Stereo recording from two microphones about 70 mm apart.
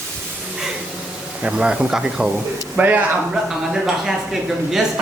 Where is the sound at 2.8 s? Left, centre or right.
Right.